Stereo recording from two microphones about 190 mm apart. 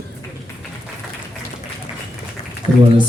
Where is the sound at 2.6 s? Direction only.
30° left (ahead or behind).